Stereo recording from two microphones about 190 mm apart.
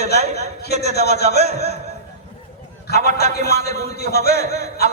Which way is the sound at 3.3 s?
55° left (ahead or behind).